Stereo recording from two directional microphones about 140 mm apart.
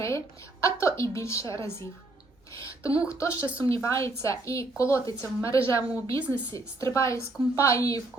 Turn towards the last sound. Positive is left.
turn(degrees=25)  # may be behind; listen again after turning